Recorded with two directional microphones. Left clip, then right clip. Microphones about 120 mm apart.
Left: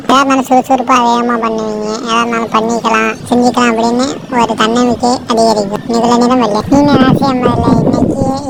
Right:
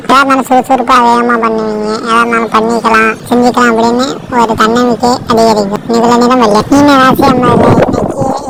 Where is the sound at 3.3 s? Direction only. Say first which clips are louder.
Right 2 dB; 5° left (ahead or behind).